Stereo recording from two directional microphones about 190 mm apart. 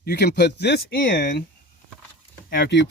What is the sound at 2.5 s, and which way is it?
Speech, 60° left (ahead or behind).